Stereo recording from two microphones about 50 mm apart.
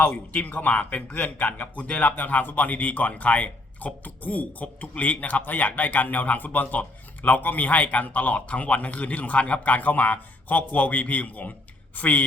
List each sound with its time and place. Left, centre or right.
0.3 s speech: left